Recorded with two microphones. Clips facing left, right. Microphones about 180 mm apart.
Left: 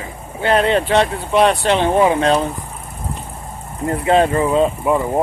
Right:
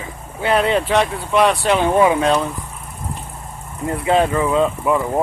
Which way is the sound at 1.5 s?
Centre (ahead or behind).